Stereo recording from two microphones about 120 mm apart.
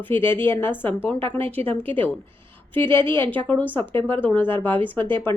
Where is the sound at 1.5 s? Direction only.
50° right (ahead or behind).